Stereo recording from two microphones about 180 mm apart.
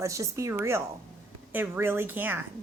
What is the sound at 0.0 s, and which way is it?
A woman's voice, 15° right (ahead or behind).